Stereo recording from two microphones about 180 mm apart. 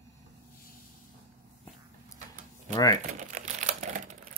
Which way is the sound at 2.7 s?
20° left (ahead or behind).